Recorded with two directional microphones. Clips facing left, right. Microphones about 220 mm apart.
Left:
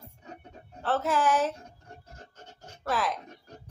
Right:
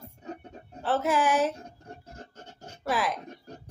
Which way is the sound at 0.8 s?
10° right (ahead or behind).